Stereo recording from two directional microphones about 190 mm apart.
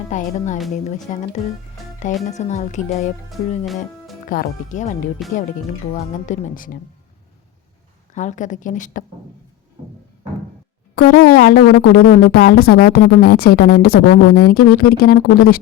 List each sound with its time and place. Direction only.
0.1 s speech: 40° left (ahead or behind)
4.3 s speech: 45° left (ahead or behind)
8.1 s speech: 40° left (ahead or behind)
10.9 s speech: 55° left (ahead or behind)